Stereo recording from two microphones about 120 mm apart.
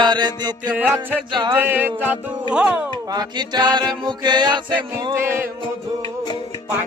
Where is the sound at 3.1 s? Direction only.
35° right (ahead or behind).